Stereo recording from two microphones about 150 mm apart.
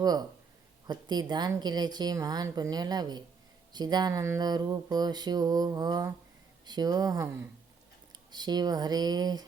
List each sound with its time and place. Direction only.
0.0 s a woman's voice: 25° right (ahead or behind)